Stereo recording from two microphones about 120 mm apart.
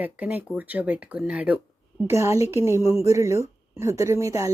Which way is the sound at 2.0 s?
25° right (ahead or behind).